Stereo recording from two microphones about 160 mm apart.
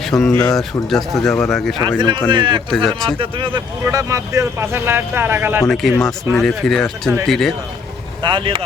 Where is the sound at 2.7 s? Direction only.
Centre (ahead or behind).